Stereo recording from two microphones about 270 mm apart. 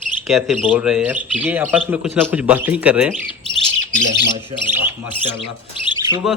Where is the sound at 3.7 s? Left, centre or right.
Right.